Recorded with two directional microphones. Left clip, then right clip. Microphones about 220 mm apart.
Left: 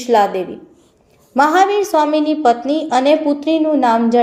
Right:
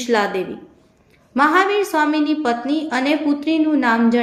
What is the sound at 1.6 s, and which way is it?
A woman's voice, 35° right (ahead or behind).